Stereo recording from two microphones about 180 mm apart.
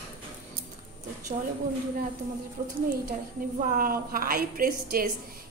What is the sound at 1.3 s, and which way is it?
Speech, 35° right (ahead or behind).